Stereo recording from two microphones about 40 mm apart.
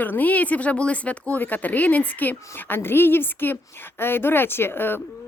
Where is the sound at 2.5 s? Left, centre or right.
Left.